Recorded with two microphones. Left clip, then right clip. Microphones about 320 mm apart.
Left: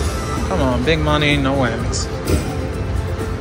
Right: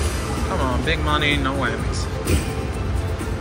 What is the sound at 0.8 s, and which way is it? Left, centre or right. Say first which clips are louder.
Speech: left 3 dB; centre.